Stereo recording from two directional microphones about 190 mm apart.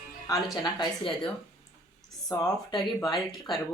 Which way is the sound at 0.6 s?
25° left (ahead or behind).